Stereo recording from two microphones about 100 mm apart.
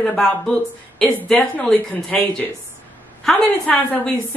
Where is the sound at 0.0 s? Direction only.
10° left (ahead or behind).